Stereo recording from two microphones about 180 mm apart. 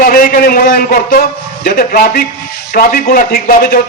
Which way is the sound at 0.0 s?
55° left (ahead or behind).